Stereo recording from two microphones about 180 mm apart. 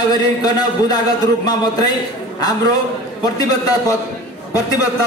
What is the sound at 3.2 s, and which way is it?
A man's voice, 20° left (ahead or behind).